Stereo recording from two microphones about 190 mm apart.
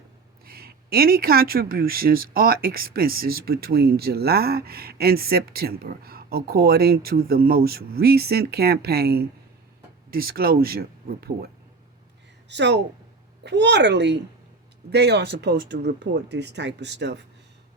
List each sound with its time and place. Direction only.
0.4 s speech: 50° right (ahead or behind)
12.5 s speech: 65° right (ahead or behind)